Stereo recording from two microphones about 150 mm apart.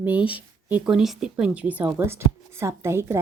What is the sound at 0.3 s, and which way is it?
Speech, 10° right (ahead or behind).